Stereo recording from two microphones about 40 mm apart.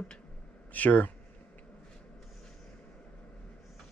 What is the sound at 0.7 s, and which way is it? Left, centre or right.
Speech, left.